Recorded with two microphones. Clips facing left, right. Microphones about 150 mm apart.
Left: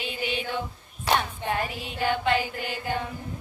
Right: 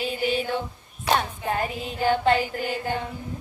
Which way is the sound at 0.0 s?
40° right (ahead or behind).